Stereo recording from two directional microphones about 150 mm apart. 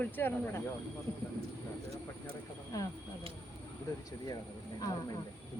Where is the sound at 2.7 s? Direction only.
20° left (ahead or behind).